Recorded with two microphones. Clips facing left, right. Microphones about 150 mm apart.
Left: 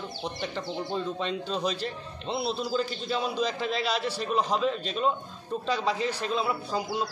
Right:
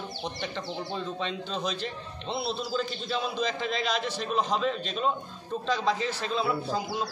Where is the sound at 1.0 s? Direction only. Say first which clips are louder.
Left 4 dB; 5° left (ahead or behind).